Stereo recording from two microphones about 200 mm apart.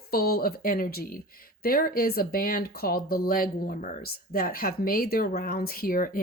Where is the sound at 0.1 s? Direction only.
50° left (ahead or behind).